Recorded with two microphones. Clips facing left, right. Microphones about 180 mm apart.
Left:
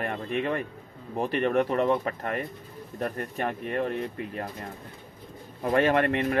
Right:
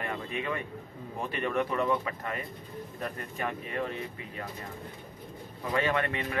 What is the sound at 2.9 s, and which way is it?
Speech, 50° left (ahead or behind).